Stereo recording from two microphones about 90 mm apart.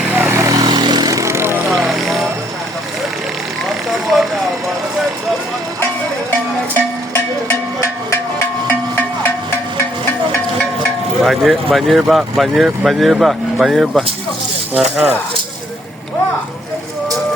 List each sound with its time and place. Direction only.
0.0 s vehicle: 20° right (ahead or behind)
0.5 s vehicle: 50° right (ahead or behind); by 1.6 s 25° right (ahead or behind)
3.8 s vehicle: centre (ahead or behind)
11.2 s speech: centre (ahead or behind)